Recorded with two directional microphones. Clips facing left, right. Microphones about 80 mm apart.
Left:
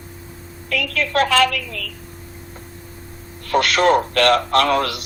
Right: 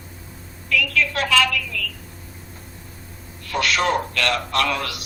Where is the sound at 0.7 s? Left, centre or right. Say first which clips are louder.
Left 1 dB; left.